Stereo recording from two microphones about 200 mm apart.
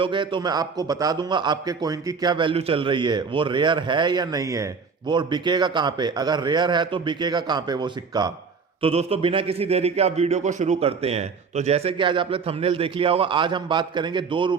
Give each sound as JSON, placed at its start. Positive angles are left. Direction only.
{"t": 0.0, "sound": "a man's voice", "side_deg": -25}